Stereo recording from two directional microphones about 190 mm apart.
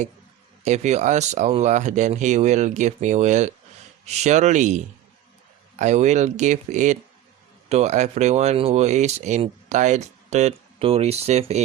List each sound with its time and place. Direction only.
0.6 s speech: 35° right (ahead or behind)